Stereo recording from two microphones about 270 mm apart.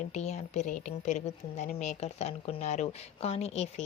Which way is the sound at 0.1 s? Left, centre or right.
Left.